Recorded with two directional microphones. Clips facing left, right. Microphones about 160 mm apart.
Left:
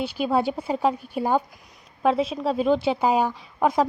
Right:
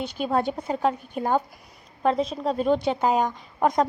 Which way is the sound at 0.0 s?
10° left (ahead or behind).